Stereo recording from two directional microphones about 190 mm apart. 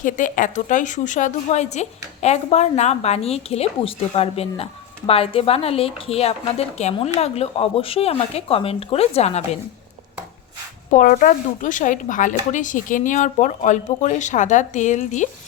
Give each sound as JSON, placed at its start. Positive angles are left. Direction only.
{"t": 0.0, "sound": "a woman's voice", "side_deg": 45}
{"t": 10.9, "sound": "a woman's voice", "side_deg": 45}